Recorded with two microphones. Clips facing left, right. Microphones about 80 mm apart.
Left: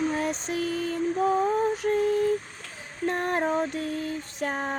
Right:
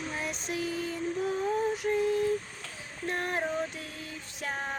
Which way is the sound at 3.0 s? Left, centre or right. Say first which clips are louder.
Left 6 dB; left.